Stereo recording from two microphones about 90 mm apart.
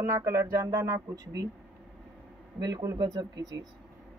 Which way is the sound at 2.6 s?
50° right (ahead or behind).